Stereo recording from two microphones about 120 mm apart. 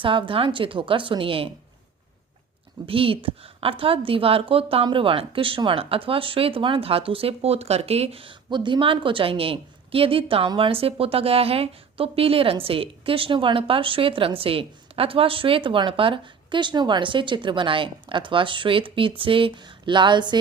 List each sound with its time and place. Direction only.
0.0 s a woman's voice: 45° right (ahead or behind)
2.8 s a woman's voice: 50° right (ahead or behind)